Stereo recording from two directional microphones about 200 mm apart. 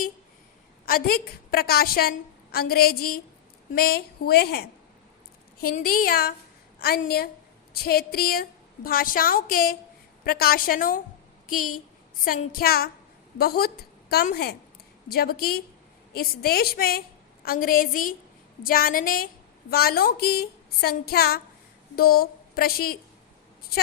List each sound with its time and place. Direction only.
0.9 s a woman's voice: 45° left (ahead or behind)